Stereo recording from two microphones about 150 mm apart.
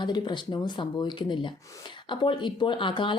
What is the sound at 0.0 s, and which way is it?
A woman's voice, 30° left (ahead or behind).